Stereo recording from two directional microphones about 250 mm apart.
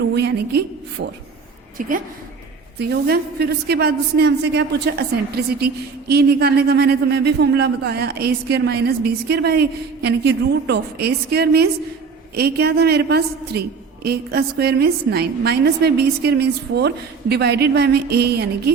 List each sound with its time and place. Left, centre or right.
0.0 s a woman's voice: right
1.8 s a woman's voice: right